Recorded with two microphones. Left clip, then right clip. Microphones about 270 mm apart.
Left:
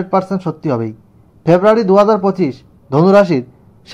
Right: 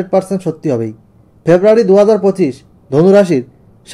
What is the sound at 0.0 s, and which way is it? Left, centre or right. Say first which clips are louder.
Speech: right 2 dB; centre.